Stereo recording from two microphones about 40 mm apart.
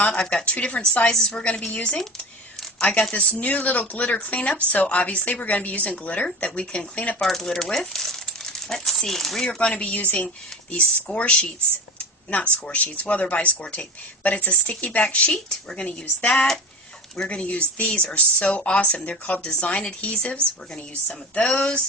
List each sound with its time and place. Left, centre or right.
0.1 s speech: left
1.1 s speech: centre
1.4 s speech: left
7.2 s speech: centre
9.5 s speech: left
15.0 s speech: left
17.2 s speech: left
21.5 s speech: left